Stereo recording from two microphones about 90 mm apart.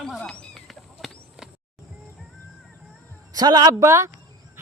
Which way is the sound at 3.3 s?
50° right (ahead or behind).